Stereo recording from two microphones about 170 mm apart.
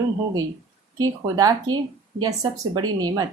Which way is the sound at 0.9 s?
20° right (ahead or behind).